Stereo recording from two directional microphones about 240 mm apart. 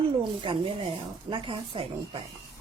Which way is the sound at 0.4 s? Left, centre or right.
Right.